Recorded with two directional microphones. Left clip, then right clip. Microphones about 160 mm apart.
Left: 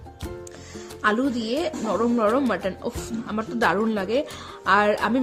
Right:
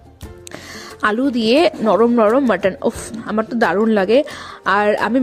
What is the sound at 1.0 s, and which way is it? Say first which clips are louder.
Speech: right 6 dB; 55° right (ahead or behind).